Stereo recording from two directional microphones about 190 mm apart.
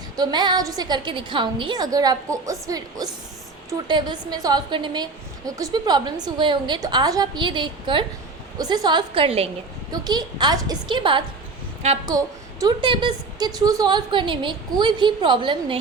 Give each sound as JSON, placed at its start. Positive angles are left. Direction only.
{"t": 0.2, "sound": "a woman's voice", "side_deg": -25}